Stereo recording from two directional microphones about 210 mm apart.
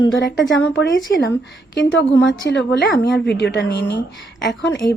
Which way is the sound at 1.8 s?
60° left (ahead or behind).